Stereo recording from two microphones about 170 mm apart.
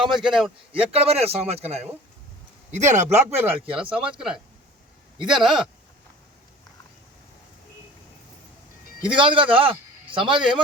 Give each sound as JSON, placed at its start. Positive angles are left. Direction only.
{"t": 0.0, "sound": "speech", "side_deg": 0}
{"t": 0.9, "sound": "speech", "side_deg": -35}
{"t": 3.2, "sound": "speech", "side_deg": -10}
{"t": 9.0, "sound": "a man's voice", "side_deg": -30}